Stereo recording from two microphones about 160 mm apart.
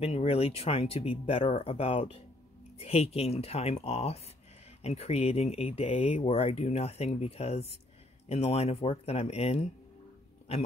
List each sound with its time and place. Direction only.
0.0 s speech: 40° left (ahead or behind)